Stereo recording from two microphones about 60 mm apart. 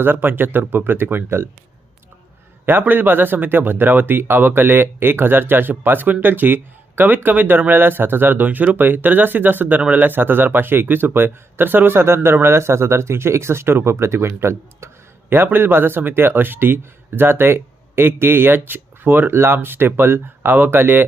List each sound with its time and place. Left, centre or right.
0.0 s speech: right
2.6 s speech: right